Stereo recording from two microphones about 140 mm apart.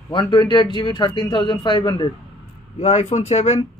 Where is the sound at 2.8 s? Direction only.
50° left (ahead or behind).